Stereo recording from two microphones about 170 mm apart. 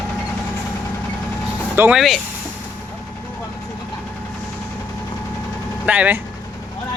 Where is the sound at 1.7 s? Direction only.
10° right (ahead or behind).